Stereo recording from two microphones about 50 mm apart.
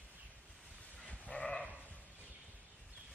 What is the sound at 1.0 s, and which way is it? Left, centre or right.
Sheep, left.